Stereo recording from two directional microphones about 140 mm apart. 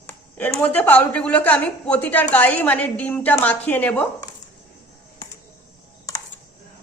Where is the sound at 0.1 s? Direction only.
15° left (ahead or behind).